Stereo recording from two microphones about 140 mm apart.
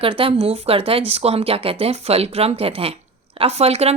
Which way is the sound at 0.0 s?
40° right (ahead or behind).